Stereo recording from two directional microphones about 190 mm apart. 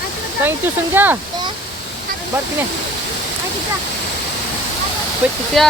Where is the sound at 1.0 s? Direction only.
10° right (ahead or behind).